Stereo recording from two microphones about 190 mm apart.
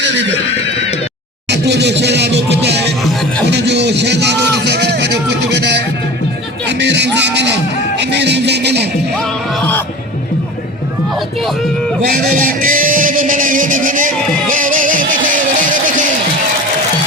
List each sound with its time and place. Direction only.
1.5 s music: 60° right (ahead or behind)
3.5 s speech: 60° right (ahead or behind)
6.7 s music: 65° right (ahead or behind)
12.1 s music: 50° right (ahead or behind)